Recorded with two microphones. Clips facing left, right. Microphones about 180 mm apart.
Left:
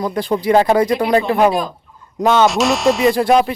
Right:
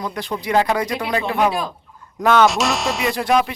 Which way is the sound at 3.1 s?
30° left (ahead or behind).